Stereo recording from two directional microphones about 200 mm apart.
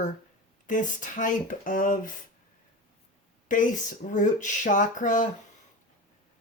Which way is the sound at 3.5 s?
40° left (ahead or behind).